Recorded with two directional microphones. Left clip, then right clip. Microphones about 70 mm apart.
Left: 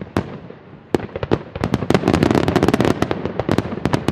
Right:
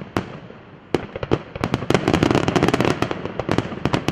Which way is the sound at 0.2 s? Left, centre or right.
Right.